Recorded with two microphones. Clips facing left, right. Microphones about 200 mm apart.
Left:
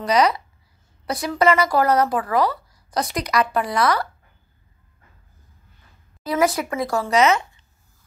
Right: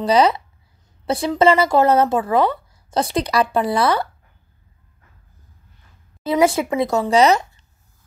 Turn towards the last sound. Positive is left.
turn(degrees=-20)  # may be behind; listen again after turning